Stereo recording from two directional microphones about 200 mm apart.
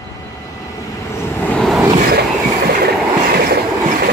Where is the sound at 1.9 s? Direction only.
45° right (ahead or behind).